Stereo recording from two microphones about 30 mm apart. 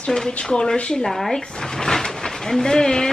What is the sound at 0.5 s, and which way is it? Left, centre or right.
Speech, left.